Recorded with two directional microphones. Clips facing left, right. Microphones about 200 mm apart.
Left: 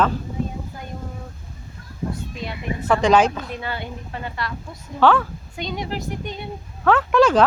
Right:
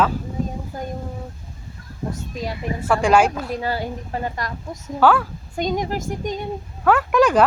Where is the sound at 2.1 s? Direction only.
40° right (ahead or behind).